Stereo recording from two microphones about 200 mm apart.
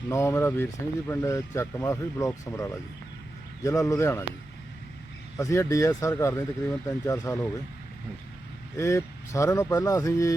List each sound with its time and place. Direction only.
0.1 s speech: 15° left (ahead or behind)
5.4 s speech: 15° left (ahead or behind)
8.8 s speech: 15° left (ahead or behind)